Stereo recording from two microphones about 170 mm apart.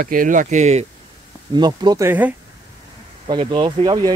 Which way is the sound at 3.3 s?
30° right (ahead or behind).